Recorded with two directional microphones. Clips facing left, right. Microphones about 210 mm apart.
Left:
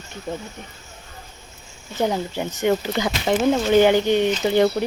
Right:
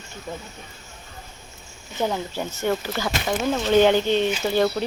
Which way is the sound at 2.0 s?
15° left (ahead or behind).